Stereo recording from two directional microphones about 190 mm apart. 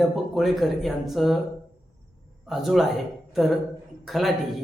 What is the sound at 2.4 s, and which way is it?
A man's voice, centre (ahead or behind).